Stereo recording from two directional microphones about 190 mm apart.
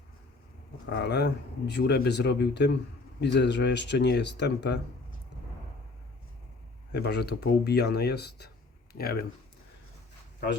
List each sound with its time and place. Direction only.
0.9 s speech: 60° left (ahead or behind)
6.9 s speech: 60° left (ahead or behind)